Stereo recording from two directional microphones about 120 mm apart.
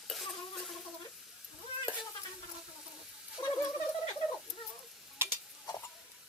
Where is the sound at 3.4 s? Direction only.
30° left (ahead or behind).